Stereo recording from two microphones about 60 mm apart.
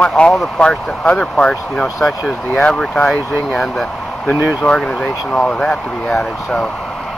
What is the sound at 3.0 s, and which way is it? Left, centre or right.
Speech, centre.